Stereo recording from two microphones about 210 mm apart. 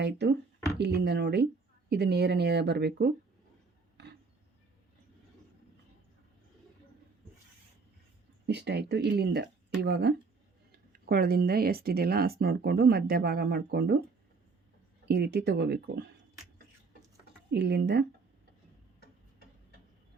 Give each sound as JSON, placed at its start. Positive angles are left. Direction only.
{"t": 0.0, "sound": "speech", "side_deg": -55}
{"t": 8.4, "sound": "speech", "side_deg": -55}
{"t": 15.0, "sound": "speech", "side_deg": -50}
{"t": 17.5, "sound": "speech", "side_deg": -50}